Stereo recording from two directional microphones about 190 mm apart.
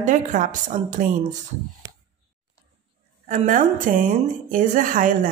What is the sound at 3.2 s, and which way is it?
A woman's voice, 40° right (ahead or behind).